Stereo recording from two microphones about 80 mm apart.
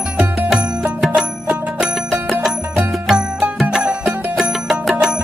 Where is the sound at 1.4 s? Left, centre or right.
Centre.